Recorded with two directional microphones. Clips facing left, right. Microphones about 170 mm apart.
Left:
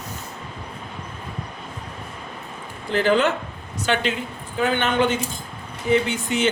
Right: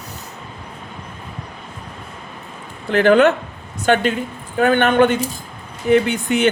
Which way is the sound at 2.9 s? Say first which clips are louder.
Right 7 dB; 60° right (ahead or behind).